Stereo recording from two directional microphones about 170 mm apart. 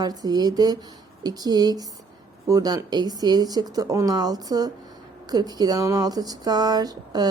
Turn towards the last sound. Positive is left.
turn(degrees=-25)  # may be behind; listen again after turning